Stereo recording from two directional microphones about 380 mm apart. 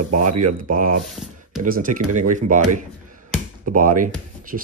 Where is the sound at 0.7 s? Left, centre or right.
Right.